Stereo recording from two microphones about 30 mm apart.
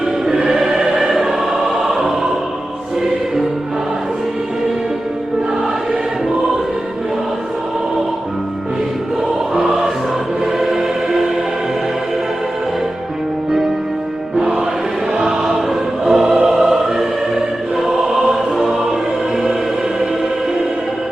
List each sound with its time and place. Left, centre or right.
0.3 s choir: centre
9.6 s music: centre
10.4 s choir: centre
15.2 s choir: centre
18.5 s music: centre